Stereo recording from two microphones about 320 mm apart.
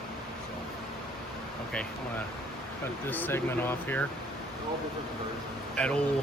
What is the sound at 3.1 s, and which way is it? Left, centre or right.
Speech, centre.